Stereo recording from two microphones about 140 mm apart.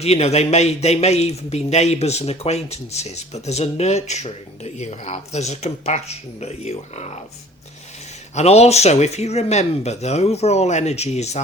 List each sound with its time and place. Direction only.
0.0 s speech: 50° left (ahead or behind)
8.4 s speech: 50° left (ahead or behind)